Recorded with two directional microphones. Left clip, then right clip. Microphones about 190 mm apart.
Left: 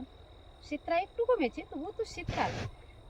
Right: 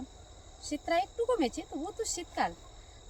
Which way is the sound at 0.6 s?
5° left (ahead or behind).